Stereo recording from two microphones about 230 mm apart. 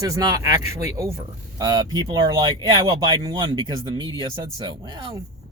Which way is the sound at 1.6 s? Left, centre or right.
Centre.